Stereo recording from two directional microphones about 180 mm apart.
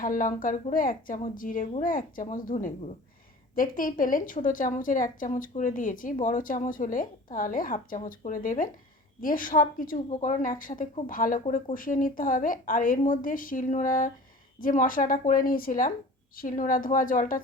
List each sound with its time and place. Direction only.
0.0 s a woman's voice: 50° left (ahead or behind)